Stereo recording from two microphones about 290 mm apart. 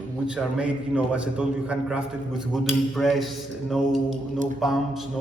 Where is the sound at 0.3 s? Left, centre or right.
Centre.